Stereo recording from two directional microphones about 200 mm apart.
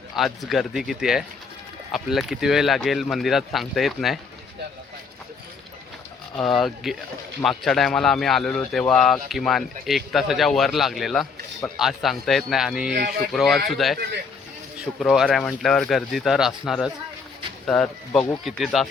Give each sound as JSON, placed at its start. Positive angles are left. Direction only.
{"t": 0.2, "sound": "speech", "side_deg": 0}
{"t": 6.3, "sound": "speech", "side_deg": 0}